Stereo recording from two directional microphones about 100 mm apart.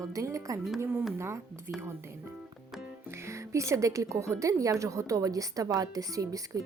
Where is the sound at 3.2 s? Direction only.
30° right (ahead or behind).